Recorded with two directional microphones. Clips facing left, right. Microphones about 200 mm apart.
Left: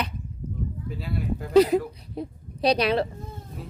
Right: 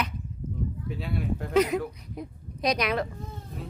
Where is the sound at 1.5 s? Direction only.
35° left (ahead or behind).